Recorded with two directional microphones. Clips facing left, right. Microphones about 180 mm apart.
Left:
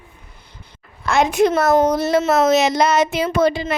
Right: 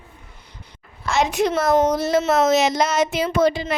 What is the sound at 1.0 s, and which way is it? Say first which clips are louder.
A woman's voice: left 4 dB; 55° left (ahead or behind).